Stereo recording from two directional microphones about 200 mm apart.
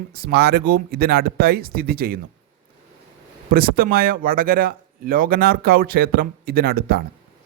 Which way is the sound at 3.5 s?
45° right (ahead or behind).